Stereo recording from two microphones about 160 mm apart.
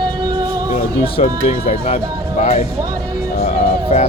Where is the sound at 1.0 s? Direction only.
35° left (ahead or behind).